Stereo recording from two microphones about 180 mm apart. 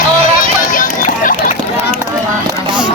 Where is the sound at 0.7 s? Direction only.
50° left (ahead or behind).